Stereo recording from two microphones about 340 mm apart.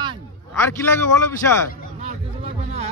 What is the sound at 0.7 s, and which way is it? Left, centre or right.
Speech, centre.